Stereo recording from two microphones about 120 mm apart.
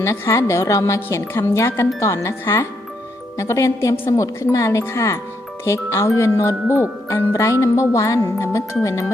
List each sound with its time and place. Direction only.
0.0 s a woman's voice: 25° left (ahead or behind)